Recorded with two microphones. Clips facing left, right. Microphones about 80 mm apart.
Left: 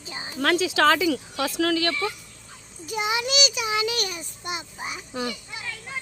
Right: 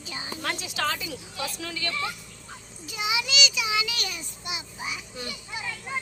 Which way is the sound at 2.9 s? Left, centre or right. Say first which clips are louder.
Left 4 dB; left.